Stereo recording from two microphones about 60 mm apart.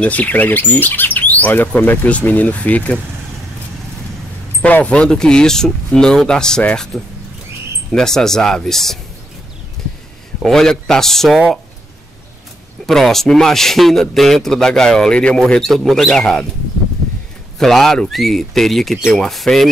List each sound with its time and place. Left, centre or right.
0.0 s bird: left
1.8 s speech: left
4.6 s a man's voice: left; by 9.0 s centre
10.4 s speech: centre
12.8 s a man's voice: centre
15.5 s speech: centre
17.6 s a man's voice: centre